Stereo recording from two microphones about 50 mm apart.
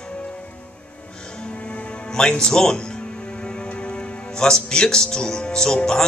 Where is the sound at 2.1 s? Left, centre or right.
Centre.